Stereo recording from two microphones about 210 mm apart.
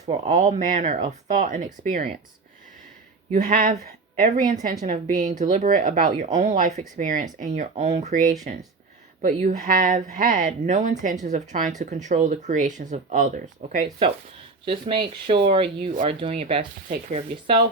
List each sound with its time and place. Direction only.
0.1 s speech: 35° right (ahead or behind)
3.3 s speech: 40° right (ahead or behind); by 15.9 s 25° right (ahead or behind)
15.9 s speech: 35° right (ahead or behind)